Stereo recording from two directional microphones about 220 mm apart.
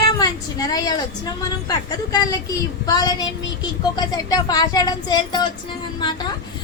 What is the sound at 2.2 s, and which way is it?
Speech, 15° left (ahead or behind).